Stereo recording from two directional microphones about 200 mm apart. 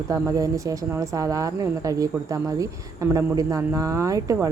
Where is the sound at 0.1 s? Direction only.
15° right (ahead or behind).